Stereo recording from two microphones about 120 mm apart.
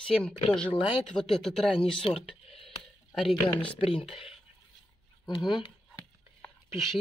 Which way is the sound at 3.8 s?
55° left (ahead or behind).